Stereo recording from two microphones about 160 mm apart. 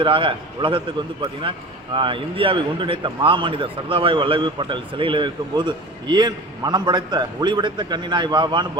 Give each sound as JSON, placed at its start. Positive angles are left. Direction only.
{"t": 0.0, "sound": "a man's voice", "side_deg": -30}